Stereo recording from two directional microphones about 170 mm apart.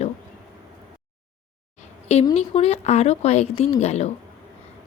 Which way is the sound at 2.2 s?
35° left (ahead or behind).